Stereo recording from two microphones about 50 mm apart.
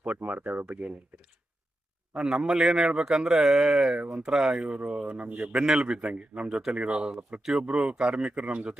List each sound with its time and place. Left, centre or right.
0.0 s speech: right
2.1 s a man's voice: centre
7.2 s speech: right
7.7 s speech: centre